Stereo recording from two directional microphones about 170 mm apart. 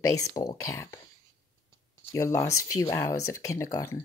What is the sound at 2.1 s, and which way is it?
Speech, 15° left (ahead or behind).